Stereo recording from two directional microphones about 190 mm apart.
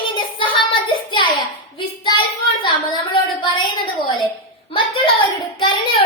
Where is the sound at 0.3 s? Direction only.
25° left (ahead or behind).